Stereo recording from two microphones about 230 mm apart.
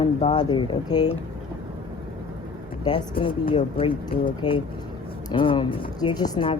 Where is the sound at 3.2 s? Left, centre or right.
Left.